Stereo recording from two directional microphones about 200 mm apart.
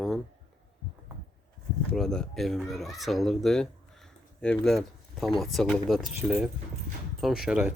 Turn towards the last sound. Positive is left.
turn(degrees=-5)  # may be behind; listen again after turning